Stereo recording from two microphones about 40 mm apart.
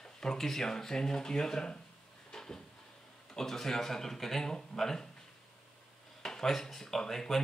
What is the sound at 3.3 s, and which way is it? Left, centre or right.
Speech, centre.